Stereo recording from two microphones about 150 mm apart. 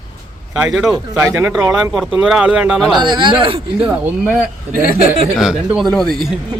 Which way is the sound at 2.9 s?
30° right (ahead or behind).